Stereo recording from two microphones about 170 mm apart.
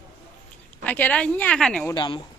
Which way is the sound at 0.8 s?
10° left (ahead or behind).